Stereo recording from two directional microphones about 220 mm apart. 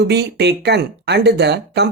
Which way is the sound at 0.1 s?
50° right (ahead or behind).